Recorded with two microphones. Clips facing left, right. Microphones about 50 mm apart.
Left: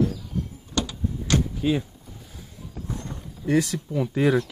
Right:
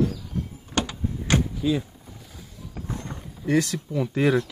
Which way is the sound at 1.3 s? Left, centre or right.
Right.